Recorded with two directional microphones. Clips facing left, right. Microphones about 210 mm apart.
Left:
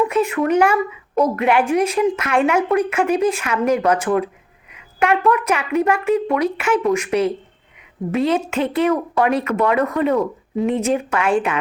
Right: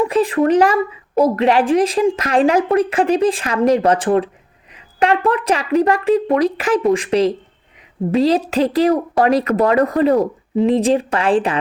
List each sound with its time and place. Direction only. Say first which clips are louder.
0.0 s speech: right 3 dB; 35° right (ahead or behind)